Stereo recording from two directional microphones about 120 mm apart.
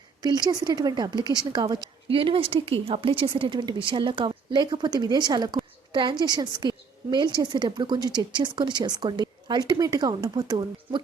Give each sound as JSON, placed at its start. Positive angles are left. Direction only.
{"t": 0.2, "sound": "a woman's voice", "side_deg": -35}
{"t": 2.1, "sound": "a woman's voice", "side_deg": -50}